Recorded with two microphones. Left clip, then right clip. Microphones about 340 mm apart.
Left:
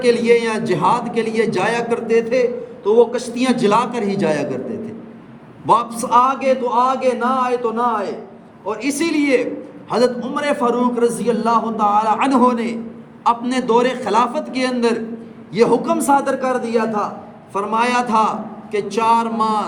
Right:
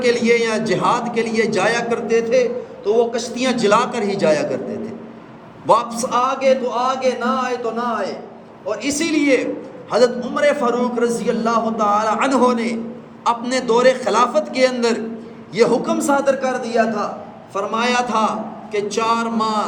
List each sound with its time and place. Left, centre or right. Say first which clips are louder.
0.0 s a man's voice: left 2 dB; centre
5.6 s a man's voice: even; centre